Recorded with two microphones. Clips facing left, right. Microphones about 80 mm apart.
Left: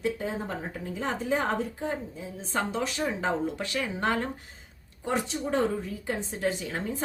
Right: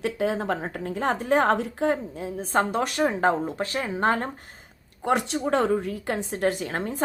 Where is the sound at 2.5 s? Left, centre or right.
Right.